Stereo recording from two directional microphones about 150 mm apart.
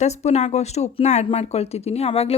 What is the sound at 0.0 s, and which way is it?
A woman's voice, 45° left (ahead or behind).